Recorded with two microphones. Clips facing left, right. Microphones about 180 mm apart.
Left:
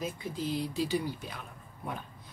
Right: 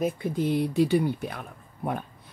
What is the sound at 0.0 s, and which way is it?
Speech, 60° right (ahead or behind).